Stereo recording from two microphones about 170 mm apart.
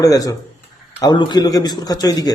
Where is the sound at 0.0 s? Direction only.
20° left (ahead or behind).